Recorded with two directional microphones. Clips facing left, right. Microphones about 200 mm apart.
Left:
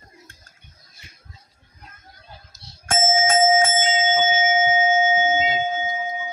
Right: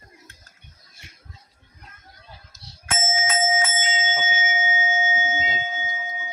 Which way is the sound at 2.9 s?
45° left (ahead or behind).